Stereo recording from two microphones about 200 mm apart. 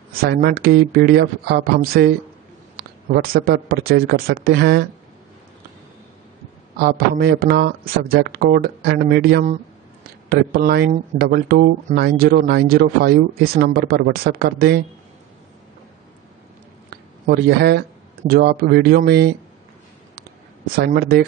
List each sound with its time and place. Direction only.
0.2 s speech: 50° right (ahead or behind)
6.8 s speech: 50° right (ahead or behind)
16.9 s speech: 50° right (ahead or behind)
20.7 s speech: 50° right (ahead or behind)